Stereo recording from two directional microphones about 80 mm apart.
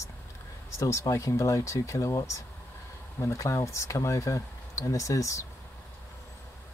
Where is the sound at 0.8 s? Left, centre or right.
Left.